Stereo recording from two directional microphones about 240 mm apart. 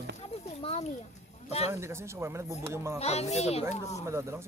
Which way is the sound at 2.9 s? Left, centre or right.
Left.